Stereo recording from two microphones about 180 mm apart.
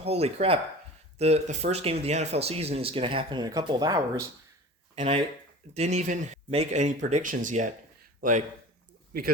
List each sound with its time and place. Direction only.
0.0 s speech: 35° right (ahead or behind)
4.9 s speech: 35° right (ahead or behind)